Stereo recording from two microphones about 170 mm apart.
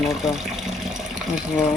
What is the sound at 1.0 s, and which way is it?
Water, 45° right (ahead or behind).